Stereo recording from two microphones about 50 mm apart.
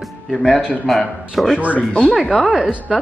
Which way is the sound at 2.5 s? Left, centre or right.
Right.